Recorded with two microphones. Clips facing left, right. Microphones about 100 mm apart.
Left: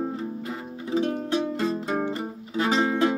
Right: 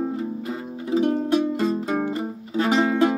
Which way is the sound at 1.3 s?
20° right (ahead or behind).